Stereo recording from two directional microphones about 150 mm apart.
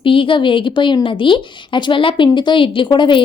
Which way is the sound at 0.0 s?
35° left (ahead or behind).